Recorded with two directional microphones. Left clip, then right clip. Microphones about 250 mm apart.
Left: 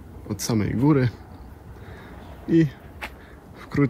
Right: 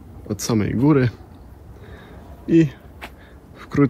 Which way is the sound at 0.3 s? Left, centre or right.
Centre.